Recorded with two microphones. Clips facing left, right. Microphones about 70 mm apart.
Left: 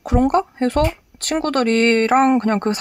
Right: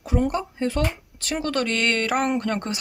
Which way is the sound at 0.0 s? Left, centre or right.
Left.